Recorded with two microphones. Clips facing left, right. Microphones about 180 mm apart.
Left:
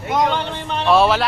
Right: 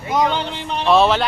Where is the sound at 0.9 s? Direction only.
5° left (ahead or behind).